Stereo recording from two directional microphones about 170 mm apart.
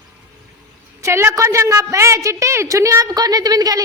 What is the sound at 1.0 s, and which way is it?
A woman's voice, 15° right (ahead or behind).